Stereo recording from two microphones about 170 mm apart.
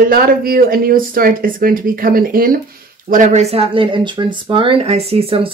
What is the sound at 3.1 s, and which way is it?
Speech, 45° right (ahead or behind).